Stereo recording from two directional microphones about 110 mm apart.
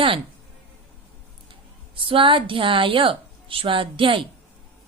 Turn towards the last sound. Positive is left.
turn(degrees=-50)  # may be behind; listen again after turning